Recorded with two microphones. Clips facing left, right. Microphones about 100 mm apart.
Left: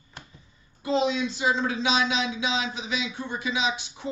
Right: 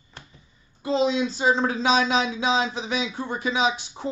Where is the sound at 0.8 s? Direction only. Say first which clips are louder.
Right 2 dB; 35° right (ahead or behind).